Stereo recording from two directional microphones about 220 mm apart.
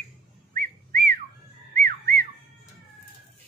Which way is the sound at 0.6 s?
40° right (ahead or behind).